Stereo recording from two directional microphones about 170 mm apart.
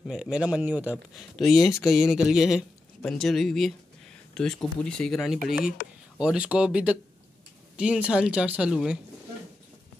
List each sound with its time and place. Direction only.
0.0 s speech: 5° right (ahead or behind)
5.8 s speech: 50° left (ahead or behind)
6.1 s speech: 5° right (ahead or behind)